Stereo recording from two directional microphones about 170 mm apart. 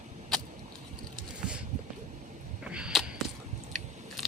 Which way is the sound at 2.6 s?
5° right (ahead or behind).